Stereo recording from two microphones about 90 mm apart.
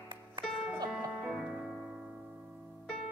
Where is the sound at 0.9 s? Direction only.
10° right (ahead or behind).